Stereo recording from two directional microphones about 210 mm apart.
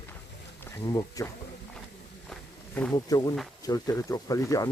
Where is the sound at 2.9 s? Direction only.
20° left (ahead or behind).